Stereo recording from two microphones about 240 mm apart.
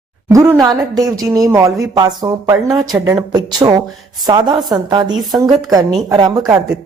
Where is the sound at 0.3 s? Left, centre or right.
Centre.